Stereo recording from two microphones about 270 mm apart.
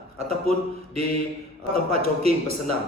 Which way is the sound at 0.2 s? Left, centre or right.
Right.